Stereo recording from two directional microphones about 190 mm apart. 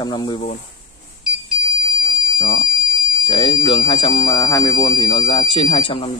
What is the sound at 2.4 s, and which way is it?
Speech, 20° left (ahead or behind).